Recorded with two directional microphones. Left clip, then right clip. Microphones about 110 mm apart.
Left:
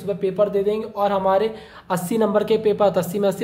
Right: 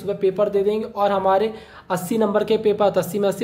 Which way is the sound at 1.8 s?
Centre (ahead or behind).